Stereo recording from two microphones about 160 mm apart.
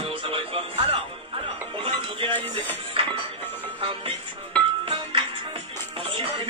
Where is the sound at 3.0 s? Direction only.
35° right (ahead or behind).